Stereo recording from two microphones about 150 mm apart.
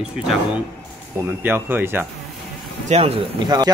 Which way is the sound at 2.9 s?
45° right (ahead or behind).